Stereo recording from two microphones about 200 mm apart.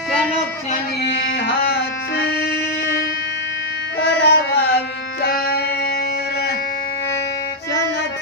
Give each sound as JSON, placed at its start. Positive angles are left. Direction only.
{"t": 1.0, "sound": "music", "side_deg": 60}
{"t": 4.0, "sound": "music", "side_deg": 60}